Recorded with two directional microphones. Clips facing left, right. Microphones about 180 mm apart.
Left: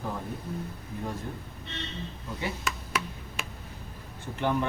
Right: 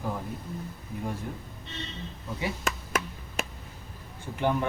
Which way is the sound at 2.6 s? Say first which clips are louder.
Right 2 dB; 45° right (ahead or behind).